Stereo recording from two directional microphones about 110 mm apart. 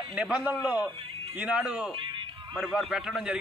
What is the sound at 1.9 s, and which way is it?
Music, 50° right (ahead or behind).